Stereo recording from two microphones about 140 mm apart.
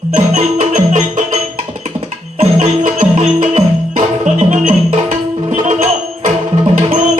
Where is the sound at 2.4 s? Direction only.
60° right (ahead or behind).